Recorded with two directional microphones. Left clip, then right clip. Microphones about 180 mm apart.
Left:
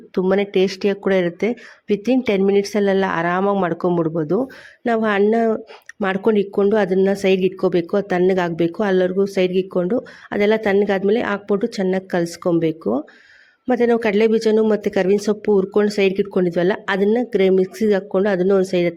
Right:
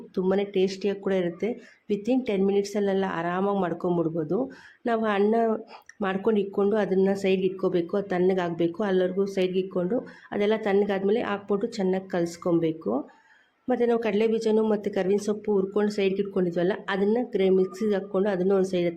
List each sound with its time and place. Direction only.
0.1 s speech: 35° left (ahead or behind)